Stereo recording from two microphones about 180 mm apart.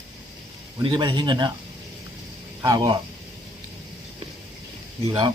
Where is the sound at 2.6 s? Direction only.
20° right (ahead or behind).